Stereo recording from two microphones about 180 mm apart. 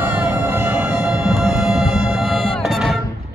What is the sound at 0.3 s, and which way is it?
Music, 15° right (ahead or behind).